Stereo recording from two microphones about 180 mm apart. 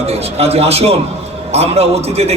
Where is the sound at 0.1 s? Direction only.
35° right (ahead or behind).